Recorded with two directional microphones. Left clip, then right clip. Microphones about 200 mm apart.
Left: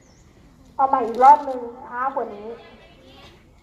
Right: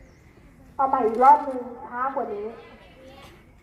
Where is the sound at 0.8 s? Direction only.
35° left (ahead or behind).